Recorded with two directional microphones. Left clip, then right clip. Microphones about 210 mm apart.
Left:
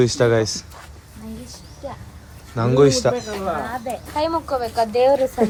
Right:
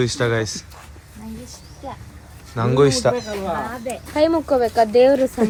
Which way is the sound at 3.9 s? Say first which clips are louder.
Right 6 dB; 40° right (ahead or behind).